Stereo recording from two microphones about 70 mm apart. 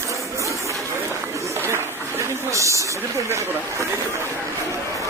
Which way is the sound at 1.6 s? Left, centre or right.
Right.